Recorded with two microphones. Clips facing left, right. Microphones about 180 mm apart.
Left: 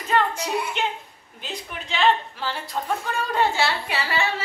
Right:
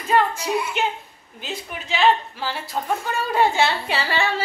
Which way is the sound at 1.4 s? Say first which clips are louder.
Right 2 dB; 5° right (ahead or behind).